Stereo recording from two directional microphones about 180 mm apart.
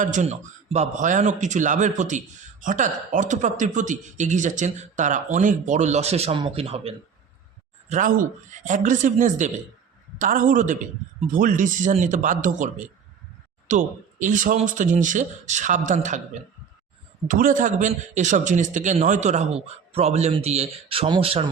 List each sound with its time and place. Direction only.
0.0 s speech: 45° right (ahead or behind)
7.9 s a man's voice: 45° right (ahead or behind)